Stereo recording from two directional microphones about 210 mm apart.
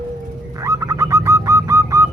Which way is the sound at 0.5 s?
15° right (ahead or behind).